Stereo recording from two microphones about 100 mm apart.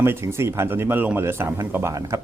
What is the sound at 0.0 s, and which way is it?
Speech, 25° right (ahead or behind).